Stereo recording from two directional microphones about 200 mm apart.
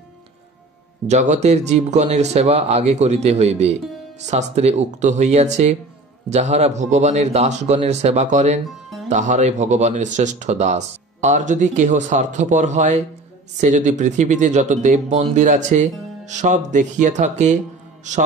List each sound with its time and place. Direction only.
1.0 s speech: 35° right (ahead or behind)